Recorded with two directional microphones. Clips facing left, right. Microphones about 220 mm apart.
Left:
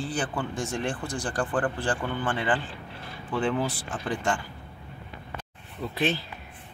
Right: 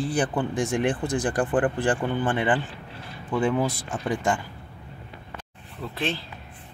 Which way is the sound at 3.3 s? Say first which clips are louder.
Right 3 dB; 10° right (ahead or behind).